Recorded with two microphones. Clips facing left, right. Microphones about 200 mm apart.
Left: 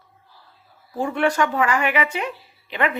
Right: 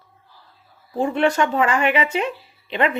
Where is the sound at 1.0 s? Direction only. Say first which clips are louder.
Right 2 dB; 25° right (ahead or behind).